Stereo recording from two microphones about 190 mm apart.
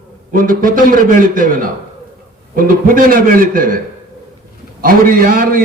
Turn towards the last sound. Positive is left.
turn(degrees=-45)  # may be behind; listen again after turning